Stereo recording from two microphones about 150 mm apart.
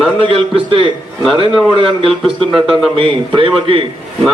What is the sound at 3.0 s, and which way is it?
Speech, 35° right (ahead or behind).